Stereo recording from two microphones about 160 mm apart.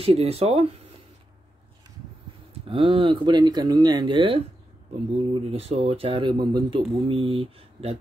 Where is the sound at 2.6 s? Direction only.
35° right (ahead or behind).